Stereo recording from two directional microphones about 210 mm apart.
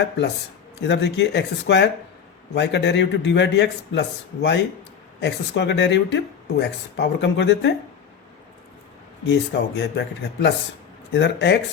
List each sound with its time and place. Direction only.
0.8 s speech: 55° left (ahead or behind)
9.3 s speech: 55° left (ahead or behind)